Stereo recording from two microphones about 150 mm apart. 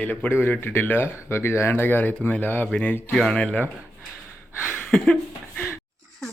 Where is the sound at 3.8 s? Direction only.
5° right (ahead or behind).